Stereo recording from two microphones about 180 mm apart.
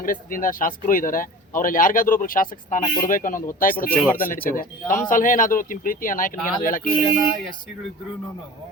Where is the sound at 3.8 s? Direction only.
10° left (ahead or behind).